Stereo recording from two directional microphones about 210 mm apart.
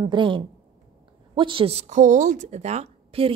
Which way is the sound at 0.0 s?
20° right (ahead or behind).